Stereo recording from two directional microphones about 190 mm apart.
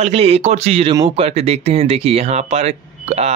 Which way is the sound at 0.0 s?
30° right (ahead or behind).